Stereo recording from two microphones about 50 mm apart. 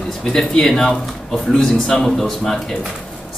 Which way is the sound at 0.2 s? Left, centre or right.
Centre.